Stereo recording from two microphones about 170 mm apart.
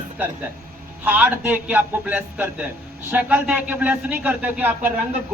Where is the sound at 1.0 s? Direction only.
10° right (ahead or behind).